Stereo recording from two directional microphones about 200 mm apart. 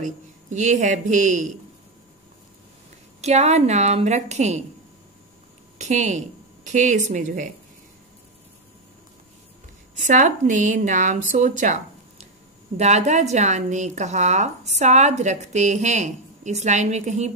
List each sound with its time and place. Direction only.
0.5 s a woman's voice: 35° right (ahead or behind)
3.2 s a woman's voice: 35° right (ahead or behind)
5.8 s a woman's voice: 35° right (ahead or behind)
10.0 s a woman's voice: 40° right (ahead or behind)
11.6 s a sound: 35° right (ahead or behind)
12.7 s a woman's voice: 35° right (ahead or behind)